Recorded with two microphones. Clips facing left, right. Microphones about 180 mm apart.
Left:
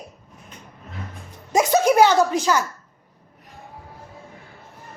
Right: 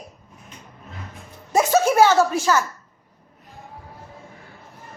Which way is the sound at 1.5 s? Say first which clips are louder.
Left 1 dB; 15° left (ahead or behind).